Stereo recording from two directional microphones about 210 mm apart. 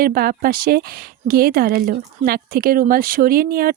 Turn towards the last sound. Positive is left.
turn(degrees=-45)  # may be behind; listen again after turning